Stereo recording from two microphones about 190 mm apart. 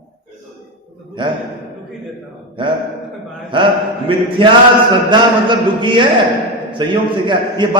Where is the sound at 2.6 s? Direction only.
25° right (ahead or behind).